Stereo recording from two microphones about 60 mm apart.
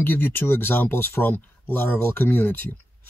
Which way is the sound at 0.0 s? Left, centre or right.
Left.